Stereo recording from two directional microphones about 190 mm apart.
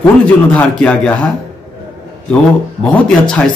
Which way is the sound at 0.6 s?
5° left (ahead or behind).